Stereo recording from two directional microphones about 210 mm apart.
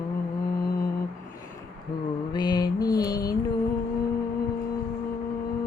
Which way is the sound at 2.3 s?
20° left (ahead or behind).